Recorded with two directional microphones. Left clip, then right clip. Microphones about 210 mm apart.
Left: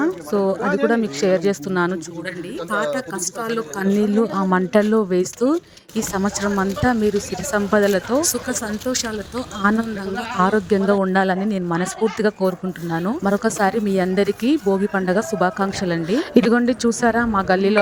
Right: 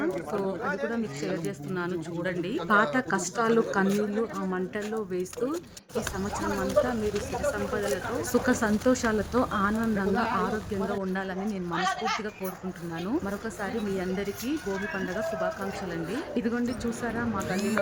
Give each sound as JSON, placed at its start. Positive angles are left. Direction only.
{"t": 0.0, "sound": "speech", "side_deg": 30}
{"t": 2.6, "sound": "a woman's voice", "side_deg": 0}
{"t": 4.0, "sound": "speech", "side_deg": 35}
{"t": 7.5, "sound": "speech", "side_deg": 35}
{"t": 9.6, "sound": "speech", "side_deg": 35}